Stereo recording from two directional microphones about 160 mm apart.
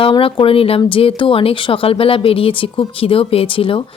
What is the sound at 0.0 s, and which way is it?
Speech, 35° left (ahead or behind).